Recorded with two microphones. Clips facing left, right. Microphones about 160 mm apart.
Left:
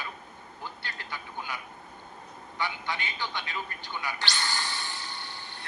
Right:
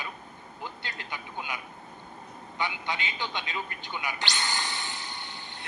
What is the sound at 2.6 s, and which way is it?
A man's voice, 20° right (ahead or behind).